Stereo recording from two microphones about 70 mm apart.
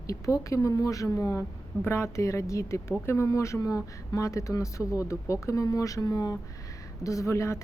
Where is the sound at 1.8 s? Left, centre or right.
Left.